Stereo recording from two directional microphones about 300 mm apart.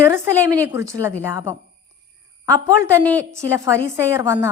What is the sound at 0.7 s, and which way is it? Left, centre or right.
Speech, centre.